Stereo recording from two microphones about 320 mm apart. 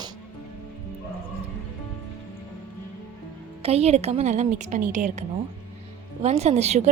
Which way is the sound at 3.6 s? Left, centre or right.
Centre.